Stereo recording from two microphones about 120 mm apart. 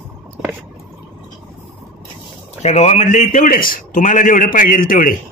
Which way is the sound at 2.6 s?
65° left (ahead or behind).